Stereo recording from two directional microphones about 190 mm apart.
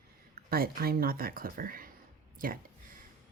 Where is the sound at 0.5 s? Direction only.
50° right (ahead or behind).